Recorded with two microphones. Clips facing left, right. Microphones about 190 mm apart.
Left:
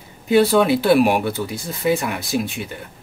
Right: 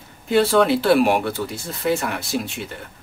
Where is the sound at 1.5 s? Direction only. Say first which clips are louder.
Left 3 dB; 15° left (ahead or behind).